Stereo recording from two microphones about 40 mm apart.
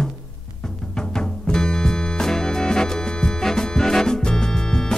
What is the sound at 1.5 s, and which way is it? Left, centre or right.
Music, centre.